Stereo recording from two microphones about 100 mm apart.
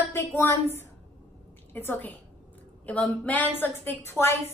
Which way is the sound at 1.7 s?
20° left (ahead or behind).